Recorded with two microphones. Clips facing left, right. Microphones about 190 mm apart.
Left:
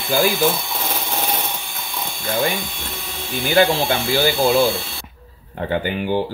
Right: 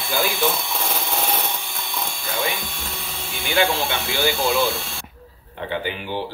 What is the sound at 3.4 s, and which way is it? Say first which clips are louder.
Speech: left 5 dB; 45° left (ahead or behind).